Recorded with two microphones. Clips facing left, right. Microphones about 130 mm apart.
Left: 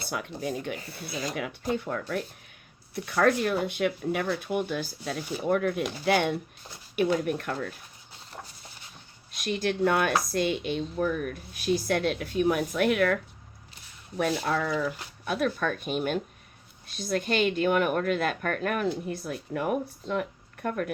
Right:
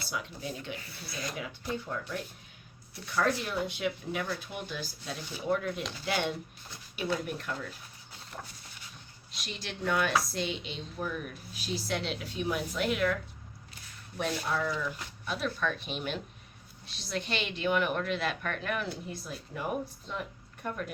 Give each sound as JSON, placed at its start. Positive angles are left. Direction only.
{"t": 0.1, "sound": "speech", "side_deg": 55}
{"t": 9.3, "sound": "a woman's voice", "side_deg": 55}
{"t": 14.2, "sound": "a woman's voice", "side_deg": 60}